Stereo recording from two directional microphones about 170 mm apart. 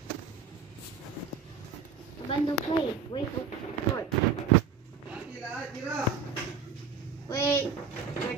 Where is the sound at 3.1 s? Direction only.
30° left (ahead or behind).